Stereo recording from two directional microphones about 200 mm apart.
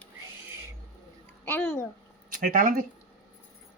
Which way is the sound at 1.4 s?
10° left (ahead or behind).